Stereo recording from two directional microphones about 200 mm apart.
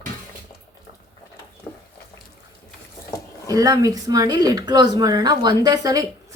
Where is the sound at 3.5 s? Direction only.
20° right (ahead or behind).